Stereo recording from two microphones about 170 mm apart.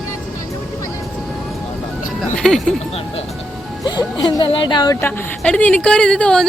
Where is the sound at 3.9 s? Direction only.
25° left (ahead or behind).